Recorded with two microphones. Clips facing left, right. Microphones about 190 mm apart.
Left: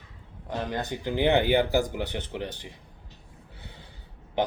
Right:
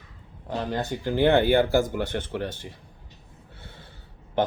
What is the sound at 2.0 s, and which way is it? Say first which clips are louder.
Speech: right 4 dB; 50° right (ahead or behind).